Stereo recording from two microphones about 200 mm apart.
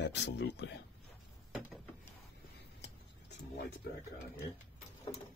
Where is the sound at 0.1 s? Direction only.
60° left (ahead or behind).